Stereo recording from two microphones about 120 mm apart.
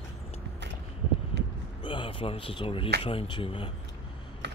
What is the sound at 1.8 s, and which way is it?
Speech, 45° left (ahead or behind).